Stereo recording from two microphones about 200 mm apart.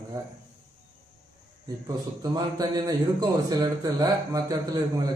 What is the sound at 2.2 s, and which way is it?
A man's voice, 20° right (ahead or behind).